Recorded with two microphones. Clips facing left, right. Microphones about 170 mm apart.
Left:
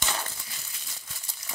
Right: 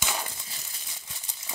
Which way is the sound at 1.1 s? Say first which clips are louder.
Right 1 dB; 20° right (ahead or behind).